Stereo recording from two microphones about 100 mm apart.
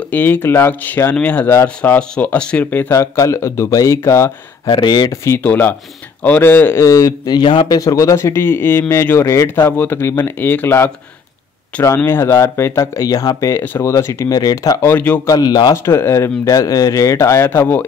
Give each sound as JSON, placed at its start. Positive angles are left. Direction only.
{"t": 0.1, "sound": "speech", "side_deg": 20}
{"t": 2.9, "sound": "speech", "side_deg": 30}
{"t": 4.6, "sound": "speech", "side_deg": 50}
{"t": 5.1, "sound": "speech", "side_deg": 30}
{"t": 5.4, "sound": "a man's voice", "side_deg": 20}
{"t": 7.8, "sound": "speech", "side_deg": 35}
{"t": 14.8, "sound": "speech", "side_deg": 20}
{"t": 15.2, "sound": "a man's voice", "side_deg": 40}
{"t": 15.7, "sound": "speech", "side_deg": 25}